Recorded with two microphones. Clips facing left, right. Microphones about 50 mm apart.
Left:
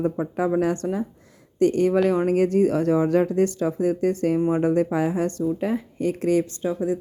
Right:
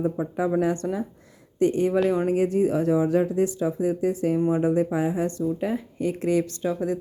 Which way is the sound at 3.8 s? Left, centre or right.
Centre.